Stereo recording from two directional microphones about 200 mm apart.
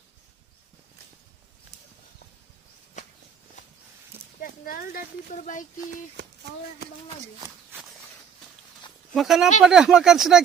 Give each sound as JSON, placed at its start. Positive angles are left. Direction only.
{"t": 4.4, "sound": "speech", "side_deg": 45}
{"t": 6.1, "sound": "speech", "side_deg": -55}
{"t": 7.3, "sound": "walk", "side_deg": -10}
{"t": 9.1, "sound": "speech", "side_deg": 0}